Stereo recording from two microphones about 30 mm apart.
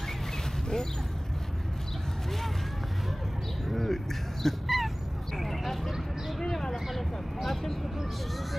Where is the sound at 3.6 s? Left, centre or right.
Centre.